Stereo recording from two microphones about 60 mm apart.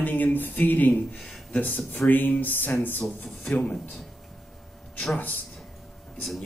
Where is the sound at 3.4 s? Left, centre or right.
Centre.